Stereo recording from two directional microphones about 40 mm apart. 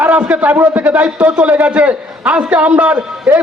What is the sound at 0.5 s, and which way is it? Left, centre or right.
Speech, right.